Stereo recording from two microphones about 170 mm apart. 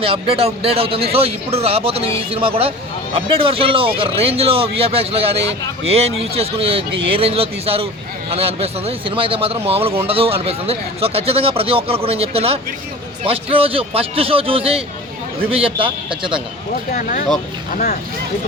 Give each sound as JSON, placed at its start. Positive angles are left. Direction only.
{"t": 0.0, "sound": "speech", "side_deg": -35}
{"t": 16.9, "sound": "speech", "side_deg": 50}